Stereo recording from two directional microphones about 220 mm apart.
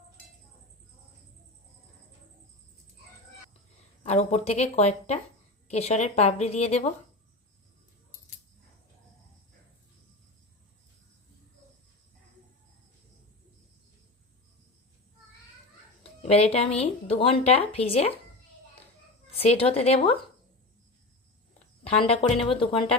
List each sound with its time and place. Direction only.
4.0 s a woman's voice: 30° left (ahead or behind)
16.2 s a woman's voice: 25° left (ahead or behind)
19.4 s a woman's voice: 25° left (ahead or behind)
21.8 s a woman's voice: 25° left (ahead or behind)